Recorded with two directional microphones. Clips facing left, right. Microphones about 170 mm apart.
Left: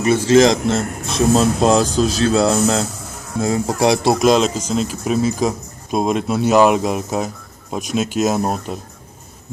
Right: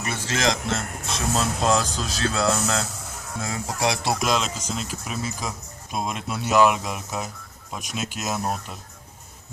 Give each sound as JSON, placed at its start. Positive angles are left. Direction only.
{"t": 0.0, "sound": "speech", "side_deg": 20}